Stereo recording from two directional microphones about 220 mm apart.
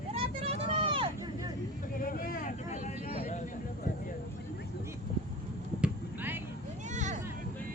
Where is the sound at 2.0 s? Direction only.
40° left (ahead or behind).